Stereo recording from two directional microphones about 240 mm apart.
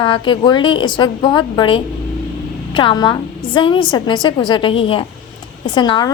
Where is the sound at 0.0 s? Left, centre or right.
Centre.